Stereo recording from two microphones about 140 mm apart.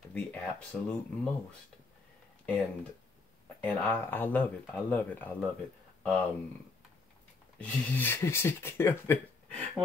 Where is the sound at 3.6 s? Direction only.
15° left (ahead or behind).